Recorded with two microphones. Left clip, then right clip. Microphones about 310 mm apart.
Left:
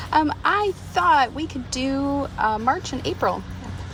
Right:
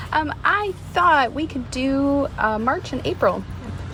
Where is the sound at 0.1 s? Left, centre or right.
Centre.